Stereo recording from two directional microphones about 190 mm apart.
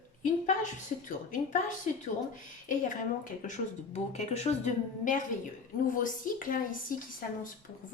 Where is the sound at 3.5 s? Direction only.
35° left (ahead or behind).